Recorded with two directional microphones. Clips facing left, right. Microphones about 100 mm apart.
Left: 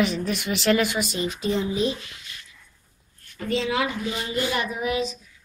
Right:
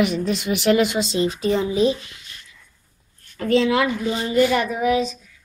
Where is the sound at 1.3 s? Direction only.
45° right (ahead or behind).